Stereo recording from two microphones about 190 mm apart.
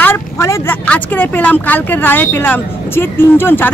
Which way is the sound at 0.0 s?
15° left (ahead or behind).